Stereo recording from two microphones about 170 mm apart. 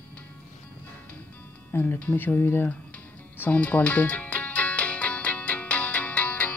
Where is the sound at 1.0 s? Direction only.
10° left (ahead or behind).